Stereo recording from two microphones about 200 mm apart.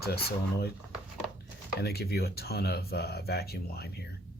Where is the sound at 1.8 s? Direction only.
50° left (ahead or behind).